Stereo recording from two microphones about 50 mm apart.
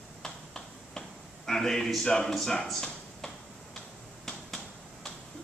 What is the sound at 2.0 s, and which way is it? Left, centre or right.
A man's voice, centre.